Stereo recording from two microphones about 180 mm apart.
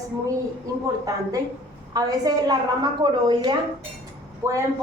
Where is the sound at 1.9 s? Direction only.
20° right (ahead or behind).